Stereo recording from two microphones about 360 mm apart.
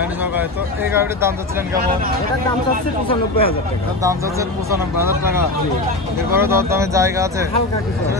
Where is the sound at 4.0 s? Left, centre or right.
Centre.